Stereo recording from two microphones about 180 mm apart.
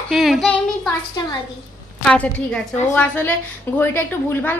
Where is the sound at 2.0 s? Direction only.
5° left (ahead or behind).